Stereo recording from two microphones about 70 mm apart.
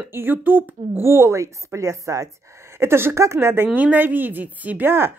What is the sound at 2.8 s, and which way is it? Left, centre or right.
Speech, right.